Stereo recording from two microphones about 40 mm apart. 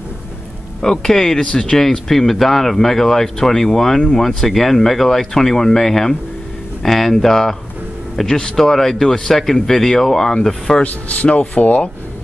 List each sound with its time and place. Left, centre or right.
0.8 s speech: centre
10.8 s speech: left